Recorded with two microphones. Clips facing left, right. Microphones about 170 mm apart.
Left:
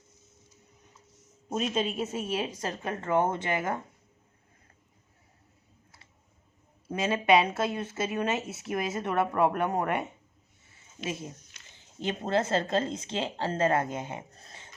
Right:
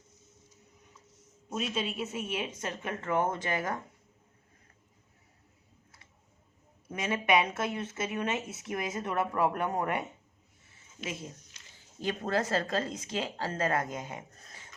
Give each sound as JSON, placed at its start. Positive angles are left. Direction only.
{"t": 1.5, "sound": "a woman's voice", "side_deg": 40}
{"t": 6.8, "sound": "a woman's voice", "side_deg": 30}
{"t": 11.0, "sound": "a woman's voice", "side_deg": 30}